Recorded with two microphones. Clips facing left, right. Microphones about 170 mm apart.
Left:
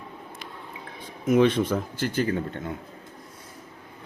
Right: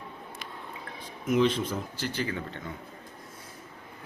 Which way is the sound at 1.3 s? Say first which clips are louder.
Left 5 dB; 55° left (ahead or behind).